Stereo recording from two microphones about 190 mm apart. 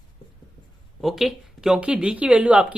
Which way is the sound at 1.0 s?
Centre (ahead or behind).